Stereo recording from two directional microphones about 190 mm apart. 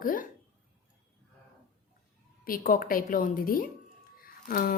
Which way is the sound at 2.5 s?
50° left (ahead or behind).